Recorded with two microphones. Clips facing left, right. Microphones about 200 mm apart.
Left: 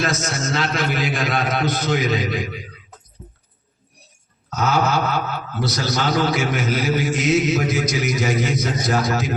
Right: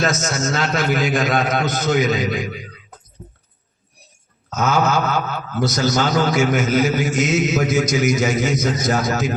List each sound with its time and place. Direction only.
0.0 s a man's voice: 45° right (ahead or behind)
4.4 s a sound: 45° right (ahead or behind)
5.0 s a man's voice: 45° right (ahead or behind)